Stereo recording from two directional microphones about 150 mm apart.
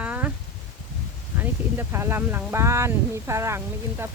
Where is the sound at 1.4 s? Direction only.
15° right (ahead or behind).